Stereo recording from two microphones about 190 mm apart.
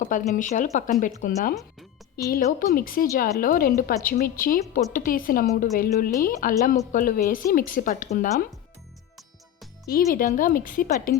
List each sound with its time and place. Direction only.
0.0 s speech: 45° left (ahead or behind)
2.1 s a woman's voice: 55° left (ahead or behind)
9.8 s a woman's voice: 50° left (ahead or behind)